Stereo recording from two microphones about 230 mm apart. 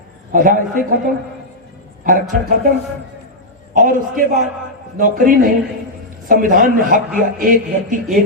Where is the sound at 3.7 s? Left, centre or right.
Right.